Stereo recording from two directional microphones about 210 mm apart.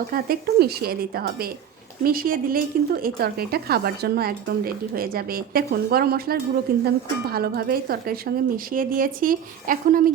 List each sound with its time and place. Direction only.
0.1 s speech: 45° right (ahead or behind)